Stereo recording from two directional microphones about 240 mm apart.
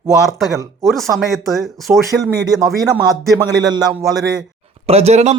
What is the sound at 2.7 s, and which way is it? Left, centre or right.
Speech, centre.